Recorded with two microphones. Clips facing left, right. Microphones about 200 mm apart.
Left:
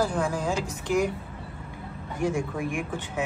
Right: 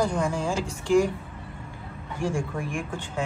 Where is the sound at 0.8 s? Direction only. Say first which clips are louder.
Right 4 dB; 20° left (ahead or behind).